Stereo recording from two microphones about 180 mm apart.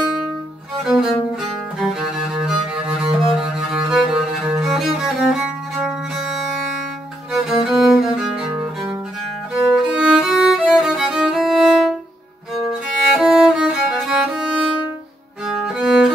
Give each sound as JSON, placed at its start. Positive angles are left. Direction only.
{"t": 0.8, "sound": "music", "side_deg": 0}
{"t": 9.5, "sound": "music", "side_deg": 0}
{"t": 13.1, "sound": "music", "side_deg": 0}